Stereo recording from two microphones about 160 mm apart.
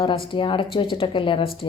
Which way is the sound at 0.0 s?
35° left (ahead or behind).